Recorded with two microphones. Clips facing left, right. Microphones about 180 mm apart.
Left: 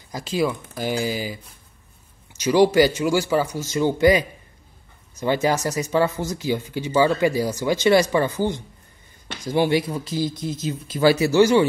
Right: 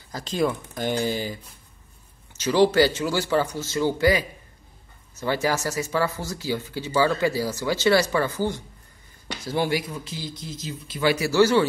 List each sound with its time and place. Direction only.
0.1 s a man's voice: 5° left (ahead or behind); by 11.0 s 50° left (ahead or behind)
11.1 s a man's voice: 20° left (ahead or behind)